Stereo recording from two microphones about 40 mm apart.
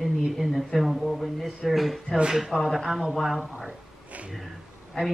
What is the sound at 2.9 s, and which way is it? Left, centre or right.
Speech, centre.